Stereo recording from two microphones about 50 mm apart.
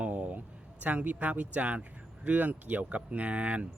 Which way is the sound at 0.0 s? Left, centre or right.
Right.